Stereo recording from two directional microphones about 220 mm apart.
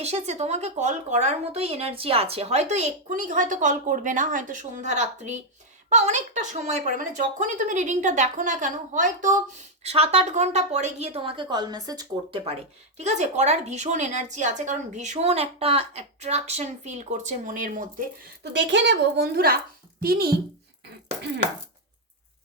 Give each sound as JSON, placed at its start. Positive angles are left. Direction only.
{"t": 0.0, "sound": "a woman's voice", "side_deg": -30}
{"t": 13.0, "sound": "speech", "side_deg": -30}
{"t": 18.5, "sound": "a woman's voice", "side_deg": -55}